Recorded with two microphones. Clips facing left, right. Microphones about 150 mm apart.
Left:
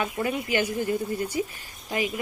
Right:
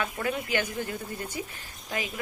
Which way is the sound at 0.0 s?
15° left (ahead or behind).